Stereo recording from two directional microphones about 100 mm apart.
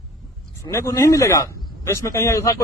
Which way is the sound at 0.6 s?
30° left (ahead or behind).